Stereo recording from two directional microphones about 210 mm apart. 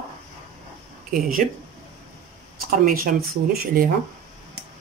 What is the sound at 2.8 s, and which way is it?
Speech, 45° right (ahead or behind).